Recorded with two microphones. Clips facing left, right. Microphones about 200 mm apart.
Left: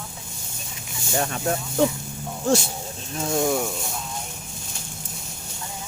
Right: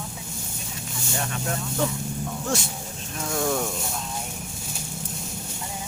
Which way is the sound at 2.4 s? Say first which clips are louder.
Left 11 dB; 30° left (ahead or behind).